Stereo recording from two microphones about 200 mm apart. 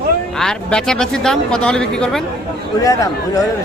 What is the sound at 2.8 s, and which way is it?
Speech, 15° left (ahead or behind).